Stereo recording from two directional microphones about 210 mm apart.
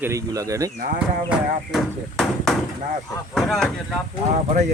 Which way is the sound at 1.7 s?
Centre (ahead or behind).